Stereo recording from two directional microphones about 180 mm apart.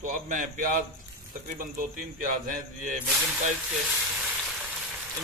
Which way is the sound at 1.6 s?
50° right (ahead or behind).